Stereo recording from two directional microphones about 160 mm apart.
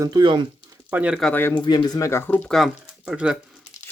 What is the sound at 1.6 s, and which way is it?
Speech, 25° left (ahead or behind).